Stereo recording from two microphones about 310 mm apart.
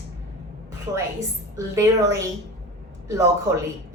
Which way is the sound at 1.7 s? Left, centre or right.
Centre.